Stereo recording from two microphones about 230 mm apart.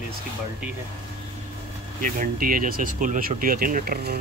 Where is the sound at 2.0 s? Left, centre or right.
Right.